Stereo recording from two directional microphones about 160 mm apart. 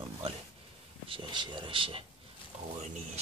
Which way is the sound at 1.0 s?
30° right (ahead or behind).